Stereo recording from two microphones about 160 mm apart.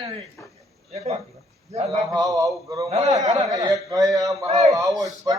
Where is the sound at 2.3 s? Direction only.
20° right (ahead or behind).